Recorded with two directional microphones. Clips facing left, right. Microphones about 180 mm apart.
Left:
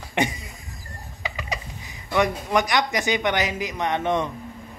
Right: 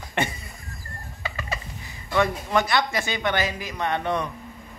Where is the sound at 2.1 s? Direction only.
15° left (ahead or behind).